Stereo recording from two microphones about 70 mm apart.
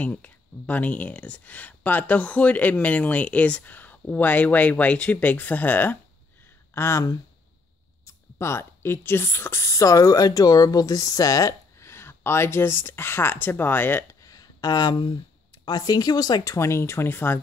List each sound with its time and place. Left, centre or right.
0.0 s speech: left
6.7 s speech: left
11.8 s speech: left
14.2 s a sound: left
15.6 s speech: left
16.5 s speech: left